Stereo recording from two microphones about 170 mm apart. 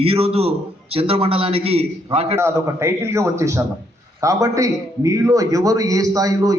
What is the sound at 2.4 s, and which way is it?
A man's voice, 15° right (ahead or behind).